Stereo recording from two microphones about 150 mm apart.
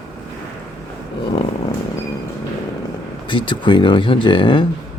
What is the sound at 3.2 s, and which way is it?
Speech, 35° left (ahead or behind).